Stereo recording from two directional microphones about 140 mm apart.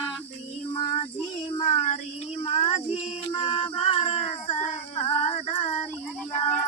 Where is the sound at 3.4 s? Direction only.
40° left (ahead or behind).